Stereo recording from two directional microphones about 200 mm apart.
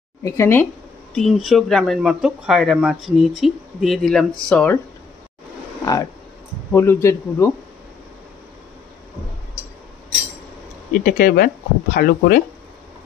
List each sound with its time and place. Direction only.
0.2 s speech: 10° left (ahead or behind)
1.1 s speech: centre (ahead or behind)
6.7 s speech: 10° left (ahead or behind)
10.9 s speech: 45° left (ahead or behind)